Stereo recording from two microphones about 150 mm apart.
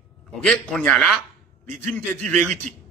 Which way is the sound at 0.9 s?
Centre (ahead or behind).